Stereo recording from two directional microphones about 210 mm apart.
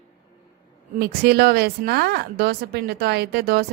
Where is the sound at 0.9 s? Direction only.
50° right (ahead or behind).